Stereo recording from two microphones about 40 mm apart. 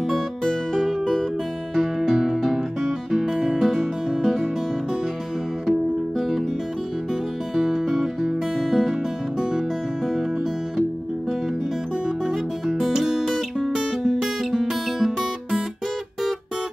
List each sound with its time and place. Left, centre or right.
0.1 s music: centre
5.7 s music: centre
7.5 s music: centre
9.4 s music: centre
12.6 s music: centre